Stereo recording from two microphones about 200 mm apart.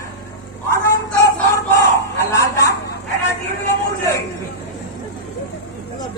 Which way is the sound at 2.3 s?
15° left (ahead or behind).